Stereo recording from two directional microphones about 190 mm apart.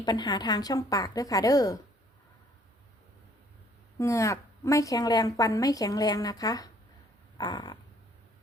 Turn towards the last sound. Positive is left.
turn(degrees=20)  # may be behind; listen again after turning